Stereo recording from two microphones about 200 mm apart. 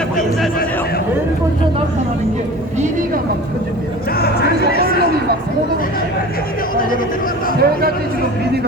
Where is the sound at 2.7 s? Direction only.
40° right (ahead or behind).